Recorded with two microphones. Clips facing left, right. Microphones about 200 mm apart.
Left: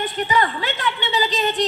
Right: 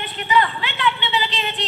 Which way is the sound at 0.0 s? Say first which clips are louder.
Even; 45° left (ahead or behind).